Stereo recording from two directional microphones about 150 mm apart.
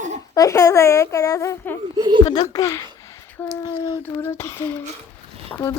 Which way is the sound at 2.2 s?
25° left (ahead or behind).